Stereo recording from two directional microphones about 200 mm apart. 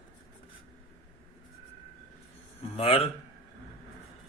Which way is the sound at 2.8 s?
30° left (ahead or behind).